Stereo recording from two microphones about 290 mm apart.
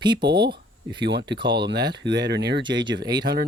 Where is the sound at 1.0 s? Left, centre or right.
Right.